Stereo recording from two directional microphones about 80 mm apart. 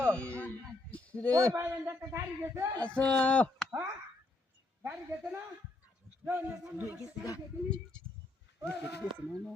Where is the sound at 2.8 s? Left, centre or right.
Centre.